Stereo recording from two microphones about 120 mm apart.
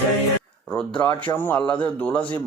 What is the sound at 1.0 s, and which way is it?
A man's voice, 15° left (ahead or behind).